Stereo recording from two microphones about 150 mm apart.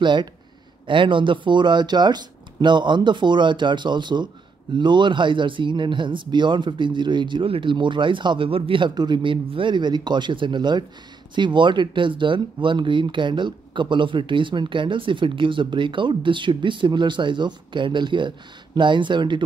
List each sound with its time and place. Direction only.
0.0 s speech: 30° right (ahead or behind)